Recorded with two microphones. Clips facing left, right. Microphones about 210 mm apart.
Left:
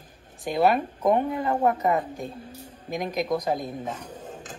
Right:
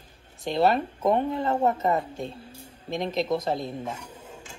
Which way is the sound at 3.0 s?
25° right (ahead or behind).